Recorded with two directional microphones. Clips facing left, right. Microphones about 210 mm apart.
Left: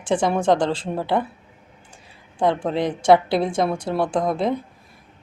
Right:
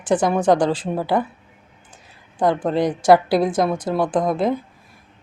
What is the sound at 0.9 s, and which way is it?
Speech, centre (ahead or behind).